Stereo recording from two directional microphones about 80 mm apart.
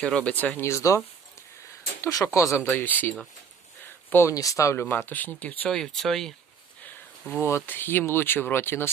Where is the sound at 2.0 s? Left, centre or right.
Left.